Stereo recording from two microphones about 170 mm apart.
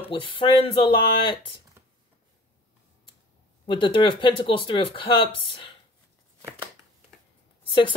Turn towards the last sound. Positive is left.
turn(degrees=30)  # may be behind; listen again after turning